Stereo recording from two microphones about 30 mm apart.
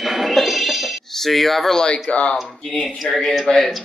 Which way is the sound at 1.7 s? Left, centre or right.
Left.